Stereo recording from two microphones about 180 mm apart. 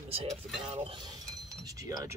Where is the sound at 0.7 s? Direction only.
30° right (ahead or behind).